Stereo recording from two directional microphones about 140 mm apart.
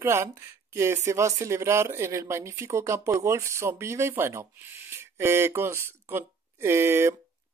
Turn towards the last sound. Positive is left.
turn(degrees=-15)  # may be behind; listen again after turning